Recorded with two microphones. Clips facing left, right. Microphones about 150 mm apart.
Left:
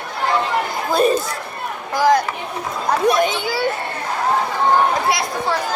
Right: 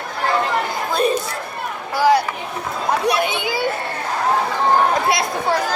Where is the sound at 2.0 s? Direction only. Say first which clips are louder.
Even; 10° right (ahead or behind).